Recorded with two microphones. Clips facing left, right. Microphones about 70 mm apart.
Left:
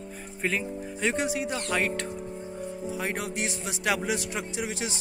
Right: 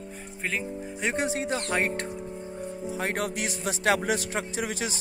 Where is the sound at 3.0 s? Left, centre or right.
Right.